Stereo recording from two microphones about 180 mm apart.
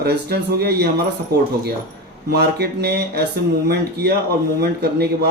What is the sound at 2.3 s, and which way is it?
Speech, 65° right (ahead or behind).